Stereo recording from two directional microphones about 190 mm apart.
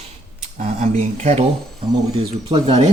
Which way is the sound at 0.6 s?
35° right (ahead or behind).